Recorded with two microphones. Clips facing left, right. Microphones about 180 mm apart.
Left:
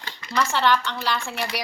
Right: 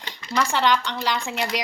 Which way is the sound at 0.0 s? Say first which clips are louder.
Right 1 dB; 15° right (ahead or behind).